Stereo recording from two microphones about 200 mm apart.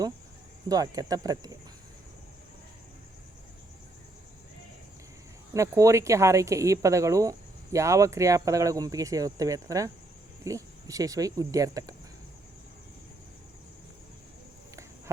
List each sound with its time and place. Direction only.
0.7 s speech: 20° right (ahead or behind)
5.5 s speech: 15° right (ahead or behind)